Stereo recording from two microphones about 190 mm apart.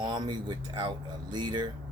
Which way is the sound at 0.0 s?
20° right (ahead or behind).